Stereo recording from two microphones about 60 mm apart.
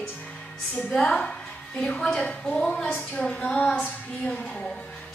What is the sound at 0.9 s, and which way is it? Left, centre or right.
A woman's voice, centre.